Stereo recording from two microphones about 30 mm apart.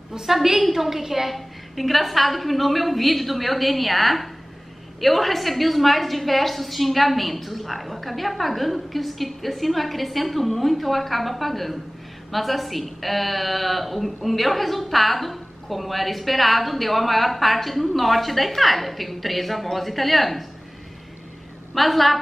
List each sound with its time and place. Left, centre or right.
0.3 s a woman's voice: centre
1.3 s a woman's voice: centre
21.7 s a woman's voice: centre